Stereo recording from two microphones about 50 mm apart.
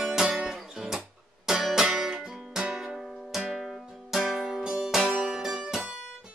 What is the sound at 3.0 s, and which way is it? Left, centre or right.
Music, centre.